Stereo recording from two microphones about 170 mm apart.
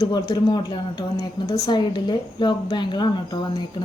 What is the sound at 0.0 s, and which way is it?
A woman's voice, 20° left (ahead or behind).